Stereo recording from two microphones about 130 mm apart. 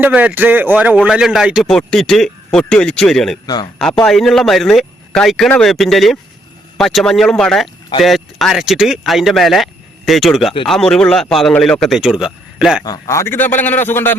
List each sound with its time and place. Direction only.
0.0 s a man's voice: 10° right (ahead or behind); by 3.3 s 5° left (ahead or behind)
3.4 s a man's voice: 30° left (ahead or behind)
4.0 s a man's voice: centre (ahead or behind)
12.8 s a man's voice: 25° left (ahead or behind)